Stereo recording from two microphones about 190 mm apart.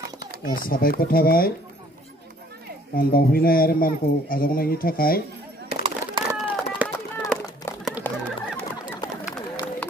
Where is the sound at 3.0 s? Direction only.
50° left (ahead or behind).